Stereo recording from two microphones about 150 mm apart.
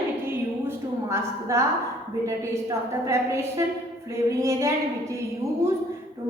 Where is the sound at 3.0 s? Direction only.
20° right (ahead or behind).